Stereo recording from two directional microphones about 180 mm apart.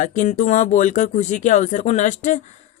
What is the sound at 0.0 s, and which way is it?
Speech, 45° left (ahead or behind).